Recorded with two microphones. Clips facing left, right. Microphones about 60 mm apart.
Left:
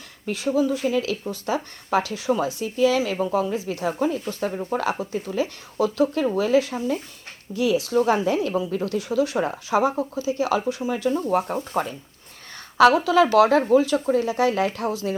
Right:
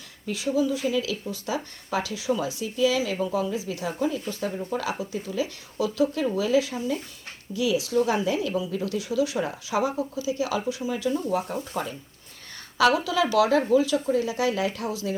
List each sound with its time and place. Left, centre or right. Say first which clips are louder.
0.3 s a woman's voice: left 3 dB; left